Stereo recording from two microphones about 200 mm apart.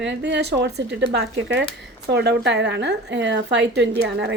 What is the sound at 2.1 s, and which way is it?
A woman's voice, 55° right (ahead or behind).